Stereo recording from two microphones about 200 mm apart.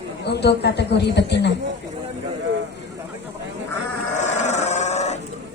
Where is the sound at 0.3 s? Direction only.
55° left (ahead or behind).